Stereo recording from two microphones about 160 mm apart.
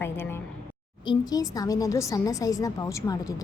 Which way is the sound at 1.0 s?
25° left (ahead or behind).